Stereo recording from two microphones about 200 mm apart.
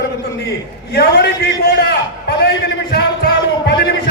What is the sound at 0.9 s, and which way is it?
Speech, 55° left (ahead or behind).